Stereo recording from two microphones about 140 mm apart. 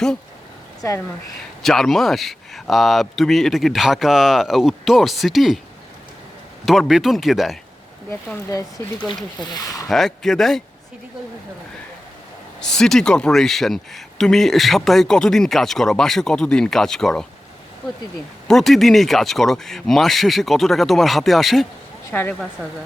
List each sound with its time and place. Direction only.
0.8 s speech: 20° left (ahead or behind)
1.6 s a man's voice: centre (ahead or behind)
6.7 s a man's voice: centre (ahead or behind)
9.6 s speech: 25° left (ahead or behind)
9.9 s a man's voice: 5° left (ahead or behind)
12.5 s a man's voice: 5° left (ahead or behind)
18.4 s a man's voice: centre (ahead or behind)
22.1 s speech: 15° left (ahead or behind)